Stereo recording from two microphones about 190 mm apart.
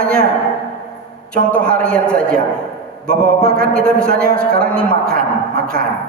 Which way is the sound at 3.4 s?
5° left (ahead or behind).